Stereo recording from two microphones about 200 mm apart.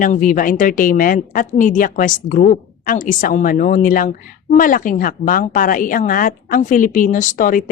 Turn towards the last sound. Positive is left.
turn(degrees=40)  # may be behind; listen again after turning